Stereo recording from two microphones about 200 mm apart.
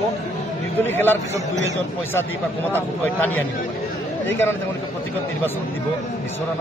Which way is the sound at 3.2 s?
10° left (ahead or behind).